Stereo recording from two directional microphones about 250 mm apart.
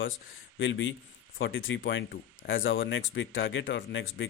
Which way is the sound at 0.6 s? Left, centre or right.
Left.